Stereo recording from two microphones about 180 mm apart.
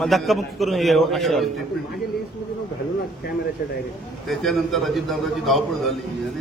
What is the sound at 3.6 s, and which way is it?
Speech, 55° left (ahead or behind).